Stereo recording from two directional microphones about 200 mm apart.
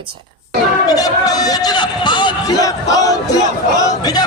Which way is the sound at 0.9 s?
20° left (ahead or behind).